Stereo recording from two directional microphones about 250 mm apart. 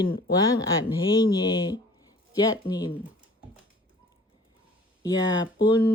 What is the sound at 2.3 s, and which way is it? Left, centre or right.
Speech, centre.